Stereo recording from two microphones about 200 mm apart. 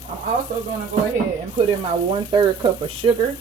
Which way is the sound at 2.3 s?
25° right (ahead or behind).